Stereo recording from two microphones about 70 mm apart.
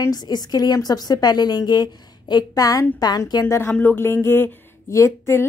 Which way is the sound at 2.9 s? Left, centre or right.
Left.